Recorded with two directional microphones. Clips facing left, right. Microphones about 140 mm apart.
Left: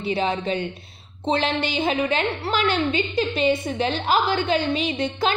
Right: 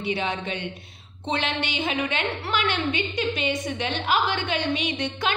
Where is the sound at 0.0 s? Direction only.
35° left (ahead or behind).